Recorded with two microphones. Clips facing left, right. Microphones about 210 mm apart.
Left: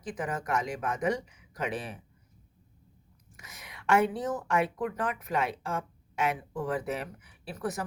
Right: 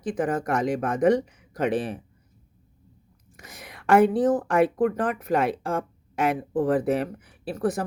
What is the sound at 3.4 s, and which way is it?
Speech, 35° right (ahead or behind).